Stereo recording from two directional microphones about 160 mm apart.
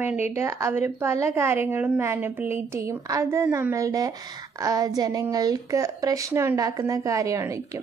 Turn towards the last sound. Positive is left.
turn(degrees=-20)  # may be behind; listen again after turning